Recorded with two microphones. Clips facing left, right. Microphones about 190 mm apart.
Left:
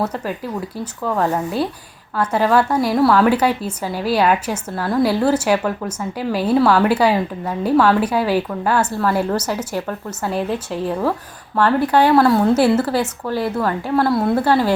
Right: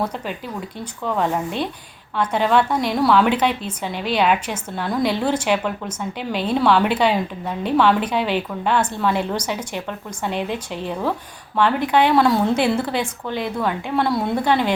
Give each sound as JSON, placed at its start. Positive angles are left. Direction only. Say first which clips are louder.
{"t": 1.0, "sound": "a woman's voice", "louder": "left 2 dB", "side_deg": 5}